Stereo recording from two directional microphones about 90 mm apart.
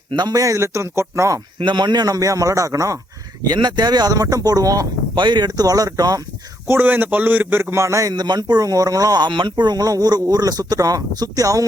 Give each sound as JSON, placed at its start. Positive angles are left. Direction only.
{"t": 0.1, "sound": "a man's voice", "side_deg": -50}
{"t": 1.5, "sound": "a man's voice", "side_deg": -60}
{"t": 3.4, "sound": "speech", "side_deg": -55}
{"t": 5.1, "sound": "speech", "side_deg": -55}
{"t": 6.7, "sound": "a man's voice", "side_deg": -25}
{"t": 8.1, "sound": "speech", "side_deg": -50}